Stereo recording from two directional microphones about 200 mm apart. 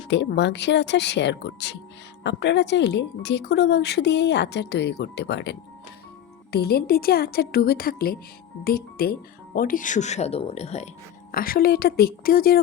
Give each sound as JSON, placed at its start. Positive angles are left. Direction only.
{"t": 0.1, "sound": "a woman's voice", "side_deg": 60}
{"t": 11.3, "sound": "speech", "side_deg": 45}